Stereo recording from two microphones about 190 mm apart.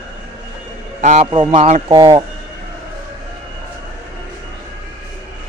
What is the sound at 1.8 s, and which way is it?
Speech, 20° right (ahead or behind).